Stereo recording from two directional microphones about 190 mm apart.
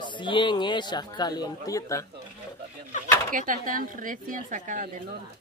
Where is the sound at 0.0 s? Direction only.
25° left (ahead or behind).